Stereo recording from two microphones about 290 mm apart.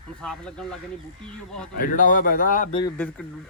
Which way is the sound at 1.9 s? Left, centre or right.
Left.